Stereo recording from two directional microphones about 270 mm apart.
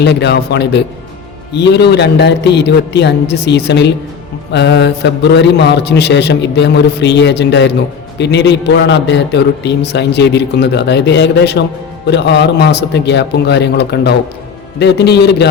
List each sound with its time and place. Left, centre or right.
0.0 s a man's voice: left